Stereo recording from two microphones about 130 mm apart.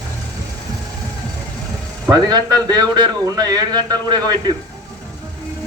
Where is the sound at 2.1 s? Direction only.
30° right (ahead or behind).